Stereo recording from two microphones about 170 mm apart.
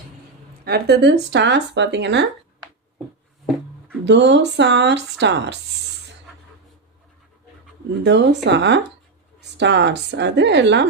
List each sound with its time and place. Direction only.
0.6 s speech: 75° right (ahead or behind); by 2.2 s 90° right
4.0 s speech: 90° right
8.0 s speech: 90° right